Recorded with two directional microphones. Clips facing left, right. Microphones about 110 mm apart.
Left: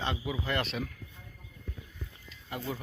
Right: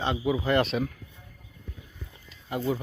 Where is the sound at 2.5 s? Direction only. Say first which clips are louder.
Right 8 dB; 15° right (ahead or behind).